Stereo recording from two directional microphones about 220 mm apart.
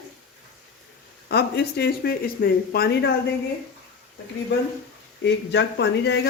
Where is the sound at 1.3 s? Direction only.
45° left (ahead or behind).